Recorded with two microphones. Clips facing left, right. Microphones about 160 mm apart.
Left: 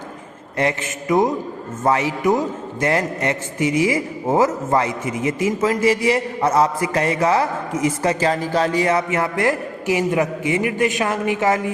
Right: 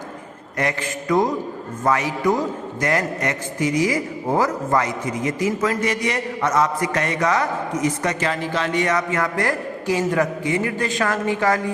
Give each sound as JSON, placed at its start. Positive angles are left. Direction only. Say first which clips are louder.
{"t": 0.5, "sound": "a man's voice", "louder": "left 3 dB", "side_deg": 25}